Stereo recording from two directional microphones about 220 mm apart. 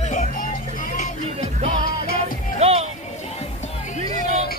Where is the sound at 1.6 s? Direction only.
40° left (ahead or behind).